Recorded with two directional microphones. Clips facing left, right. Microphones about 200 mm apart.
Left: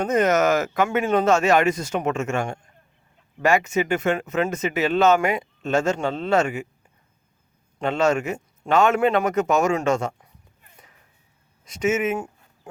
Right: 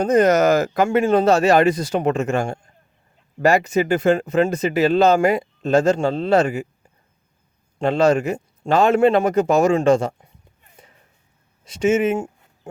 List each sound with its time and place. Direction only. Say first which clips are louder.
0.0 s speech: right 4 dB; 35° right (ahead or behind)
7.8 s speech: right 4 dB; 35° right (ahead or behind)
11.6 s speech: right 5 dB; 30° right (ahead or behind)